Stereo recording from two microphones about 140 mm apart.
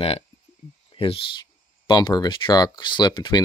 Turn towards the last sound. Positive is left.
turn(degrees=30)  # may be behind; listen again after turning